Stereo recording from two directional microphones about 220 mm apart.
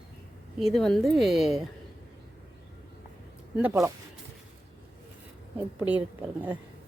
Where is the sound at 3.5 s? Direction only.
10° right (ahead or behind).